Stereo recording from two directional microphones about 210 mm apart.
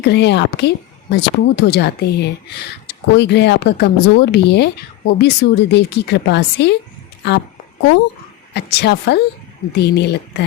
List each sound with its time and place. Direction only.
0.0 s a woman's voice: 55° left (ahead or behind)
8.5 s a woman's voice: 50° left (ahead or behind)